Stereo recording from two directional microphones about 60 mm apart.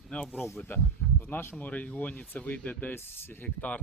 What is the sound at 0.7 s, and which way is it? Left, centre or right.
Speech, left.